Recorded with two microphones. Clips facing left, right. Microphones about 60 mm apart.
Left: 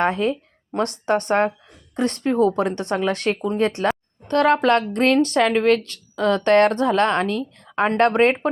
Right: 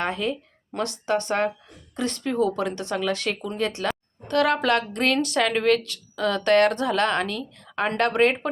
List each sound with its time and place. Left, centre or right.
0.0 s a woman's voice: left
0.8 s speech: left
2.2 s speech: left
2.5 s speech: left
3.3 s speech: left
3.6 s a woman's voice: left